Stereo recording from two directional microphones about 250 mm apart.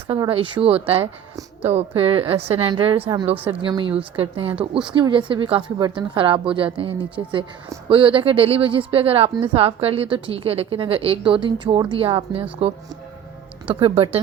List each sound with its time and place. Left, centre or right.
0.1 s speech: right
13.7 s speech: right